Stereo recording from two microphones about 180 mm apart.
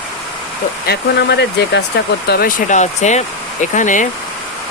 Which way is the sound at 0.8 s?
65° left (ahead or behind).